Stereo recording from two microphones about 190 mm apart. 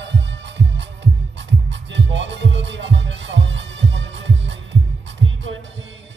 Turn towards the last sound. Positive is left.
turn(degrees=-90)